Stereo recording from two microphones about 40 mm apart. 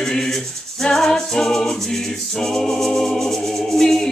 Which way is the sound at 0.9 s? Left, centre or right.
Centre.